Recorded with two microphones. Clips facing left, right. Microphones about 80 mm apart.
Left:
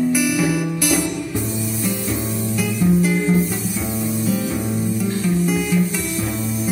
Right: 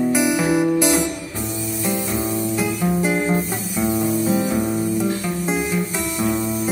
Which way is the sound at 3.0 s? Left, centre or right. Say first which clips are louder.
Left 1 dB; right.